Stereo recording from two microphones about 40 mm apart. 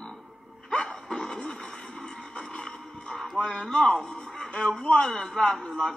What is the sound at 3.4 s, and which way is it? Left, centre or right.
A man's voice, centre.